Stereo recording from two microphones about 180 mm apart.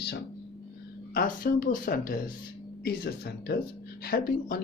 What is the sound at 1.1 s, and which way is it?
Speech, 50° left (ahead or behind).